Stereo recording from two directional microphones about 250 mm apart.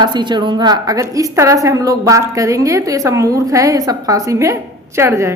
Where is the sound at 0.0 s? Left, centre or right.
Centre.